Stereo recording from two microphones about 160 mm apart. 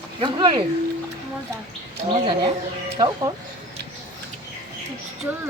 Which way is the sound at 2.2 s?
25° right (ahead or behind).